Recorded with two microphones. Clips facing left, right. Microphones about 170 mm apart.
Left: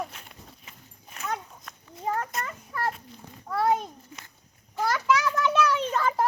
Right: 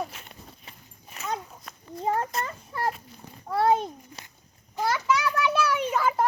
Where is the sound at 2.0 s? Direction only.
25° right (ahead or behind).